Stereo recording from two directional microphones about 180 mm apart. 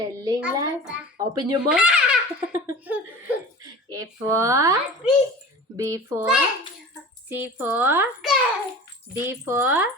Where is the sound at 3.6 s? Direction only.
20° right (ahead or behind).